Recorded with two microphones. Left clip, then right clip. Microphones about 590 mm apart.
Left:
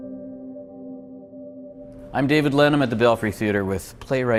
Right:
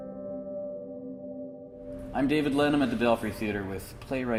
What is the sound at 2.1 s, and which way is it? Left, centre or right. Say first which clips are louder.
Speech: left 8 dB; left.